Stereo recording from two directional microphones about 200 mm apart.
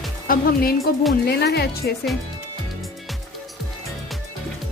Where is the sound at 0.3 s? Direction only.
45° left (ahead or behind).